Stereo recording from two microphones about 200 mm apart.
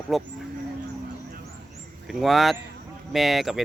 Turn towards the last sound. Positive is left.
turn(degrees=0)  # may be behind; listen again after turning